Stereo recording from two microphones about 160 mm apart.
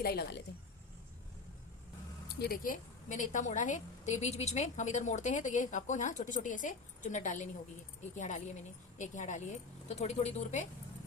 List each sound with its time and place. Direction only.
0.0 s speech: 75° left (ahead or behind)
2.3 s a woman's voice: 75° left (ahead or behind); by 10.7 s 45° left (ahead or behind)